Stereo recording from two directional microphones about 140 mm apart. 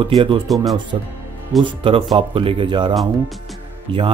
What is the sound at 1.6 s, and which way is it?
Speech, 35° right (ahead or behind).